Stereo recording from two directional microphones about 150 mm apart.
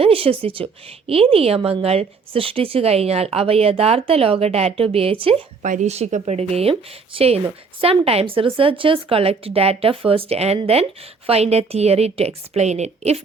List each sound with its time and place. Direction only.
0.0 s a woman's voice: 40° right (ahead or behind)
5.6 s a woman's voice: 55° right (ahead or behind)